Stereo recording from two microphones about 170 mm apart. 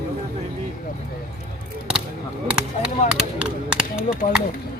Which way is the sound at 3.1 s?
5° right (ahead or behind).